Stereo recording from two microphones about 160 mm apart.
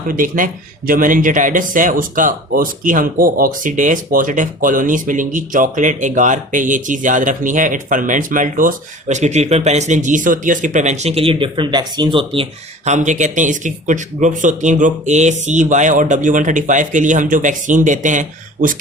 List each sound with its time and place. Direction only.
0.1 s speech: 60° right (ahead or behind)